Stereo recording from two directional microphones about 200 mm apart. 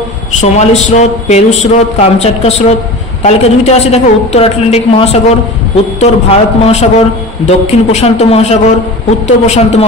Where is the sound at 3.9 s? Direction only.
30° left (ahead or behind).